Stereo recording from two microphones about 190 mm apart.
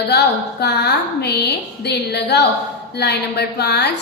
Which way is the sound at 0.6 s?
60° left (ahead or behind).